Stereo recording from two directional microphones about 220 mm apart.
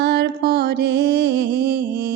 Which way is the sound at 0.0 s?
50° right (ahead or behind).